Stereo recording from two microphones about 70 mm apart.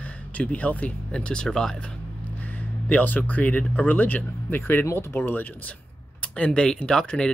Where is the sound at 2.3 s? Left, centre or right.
Left.